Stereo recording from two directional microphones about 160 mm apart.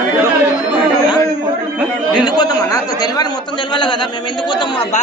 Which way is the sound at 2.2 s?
25° left (ahead or behind).